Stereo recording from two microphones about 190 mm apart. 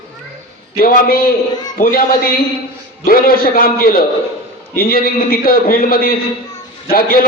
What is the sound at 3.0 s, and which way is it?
A man's voice, 50° left (ahead or behind).